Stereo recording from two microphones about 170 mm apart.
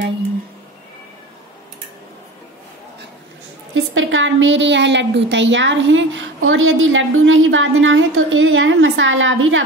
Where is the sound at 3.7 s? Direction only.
90° right.